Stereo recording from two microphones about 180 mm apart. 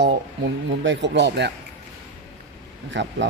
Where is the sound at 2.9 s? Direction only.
85° right.